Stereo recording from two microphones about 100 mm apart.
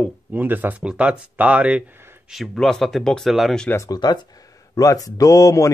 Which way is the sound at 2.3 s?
Centre (ahead or behind).